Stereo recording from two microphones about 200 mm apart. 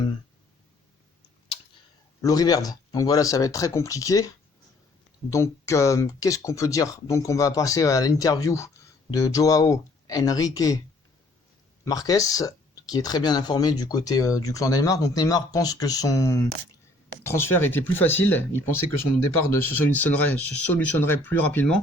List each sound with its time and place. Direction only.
2.2 s speech: 20° left (ahead or behind)
5.3 s speech: 15° left (ahead or behind)
11.9 s speech: 15° left (ahead or behind)